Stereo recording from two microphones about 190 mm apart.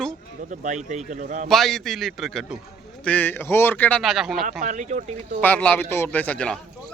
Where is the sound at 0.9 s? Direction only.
40° right (ahead or behind).